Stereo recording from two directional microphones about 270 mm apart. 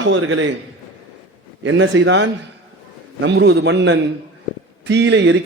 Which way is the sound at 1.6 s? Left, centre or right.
Right.